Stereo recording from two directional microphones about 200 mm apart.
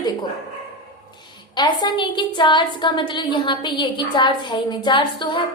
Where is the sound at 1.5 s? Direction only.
20° left (ahead or behind).